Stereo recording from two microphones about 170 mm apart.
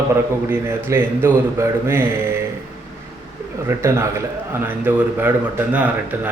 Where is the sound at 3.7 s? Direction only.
15° right (ahead or behind).